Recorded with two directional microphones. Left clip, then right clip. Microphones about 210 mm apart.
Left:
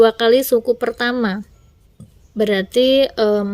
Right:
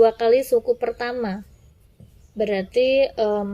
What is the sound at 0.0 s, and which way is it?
A woman's voice, 45° left (ahead or behind).